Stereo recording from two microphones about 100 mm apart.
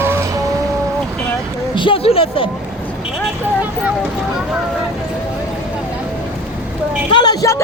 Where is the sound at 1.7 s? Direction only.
55° left (ahead or behind).